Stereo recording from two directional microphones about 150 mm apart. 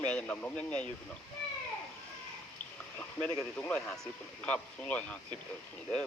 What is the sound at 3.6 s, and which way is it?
Speech, 10° left (ahead or behind).